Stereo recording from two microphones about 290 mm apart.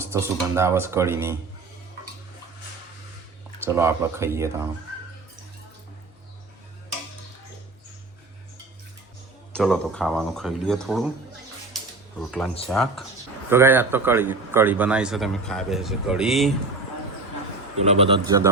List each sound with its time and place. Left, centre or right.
0.0 s speech: centre
3.7 s speech: centre
9.5 s a man's voice: centre
12.6 s a man's voice: centre
17.8 s a man's voice: right